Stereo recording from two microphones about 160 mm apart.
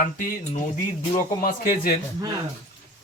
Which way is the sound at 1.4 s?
70° left (ahead or behind).